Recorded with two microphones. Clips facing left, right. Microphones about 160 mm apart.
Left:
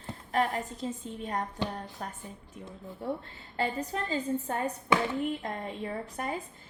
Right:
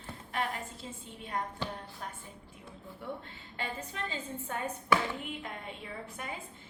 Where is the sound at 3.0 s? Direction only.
40° left (ahead or behind).